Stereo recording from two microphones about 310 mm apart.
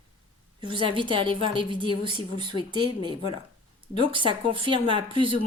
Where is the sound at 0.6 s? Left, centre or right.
Centre.